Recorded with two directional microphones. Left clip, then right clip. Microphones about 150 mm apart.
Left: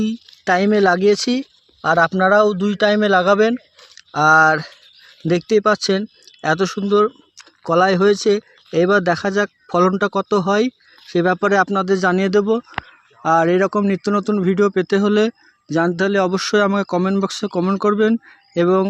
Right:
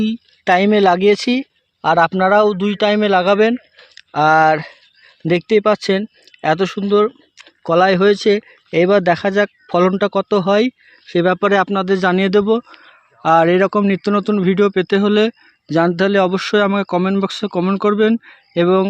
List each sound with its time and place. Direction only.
0.0 s speech: 10° right (ahead or behind)
15.6 s speech: 20° right (ahead or behind)
16.3 s speech: 5° right (ahead or behind)